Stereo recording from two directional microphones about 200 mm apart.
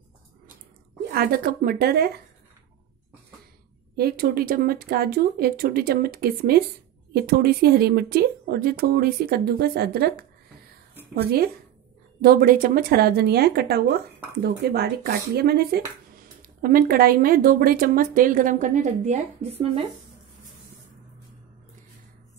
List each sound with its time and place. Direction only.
1.1 s speech: 45° right (ahead or behind)
3.9 s speech: 50° right (ahead or behind); by 19.9 s 30° right (ahead or behind)